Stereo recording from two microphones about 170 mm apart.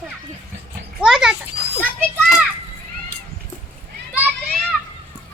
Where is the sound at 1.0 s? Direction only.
Centre (ahead or behind).